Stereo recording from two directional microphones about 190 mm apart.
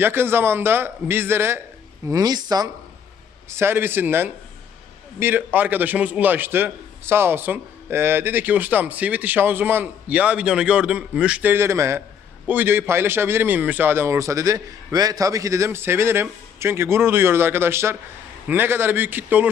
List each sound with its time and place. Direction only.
0.0 s a man's voice: 10° right (ahead or behind)